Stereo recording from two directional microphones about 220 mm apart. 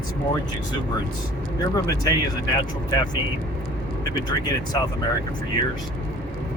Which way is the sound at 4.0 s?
15° left (ahead or behind).